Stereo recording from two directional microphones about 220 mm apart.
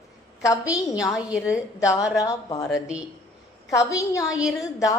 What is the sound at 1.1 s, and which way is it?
Speech, centre (ahead or behind).